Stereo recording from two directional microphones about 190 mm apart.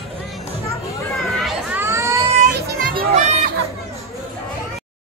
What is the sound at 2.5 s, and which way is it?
Children playing, 55° right (ahead or behind).